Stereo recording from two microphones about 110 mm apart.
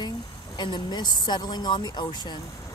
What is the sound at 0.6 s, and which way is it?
Speech, 40° left (ahead or behind).